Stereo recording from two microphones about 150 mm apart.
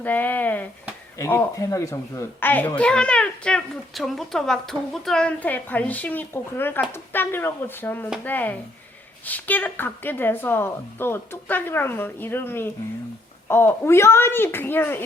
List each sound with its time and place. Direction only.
0.0 s a child's voice: 10° left (ahead or behind)